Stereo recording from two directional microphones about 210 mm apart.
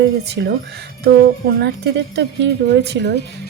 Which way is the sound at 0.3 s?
50° right (ahead or behind).